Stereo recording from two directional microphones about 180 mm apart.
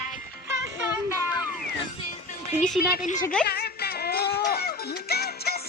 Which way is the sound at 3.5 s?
65° left (ahead or behind).